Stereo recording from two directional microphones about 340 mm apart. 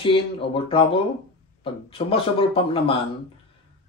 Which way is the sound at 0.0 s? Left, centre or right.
Centre.